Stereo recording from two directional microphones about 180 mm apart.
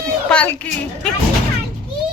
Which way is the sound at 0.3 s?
5° left (ahead or behind).